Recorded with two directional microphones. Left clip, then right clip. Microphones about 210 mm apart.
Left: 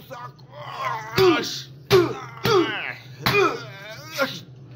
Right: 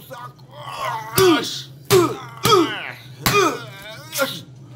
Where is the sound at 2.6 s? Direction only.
Centre (ahead or behind).